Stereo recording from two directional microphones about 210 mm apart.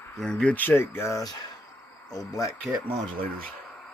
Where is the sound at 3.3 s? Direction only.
5° left (ahead or behind).